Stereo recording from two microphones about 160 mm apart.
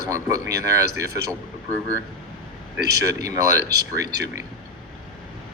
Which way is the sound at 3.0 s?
20° right (ahead or behind).